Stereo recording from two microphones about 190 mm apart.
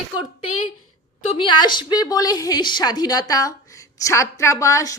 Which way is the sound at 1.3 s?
25° left (ahead or behind).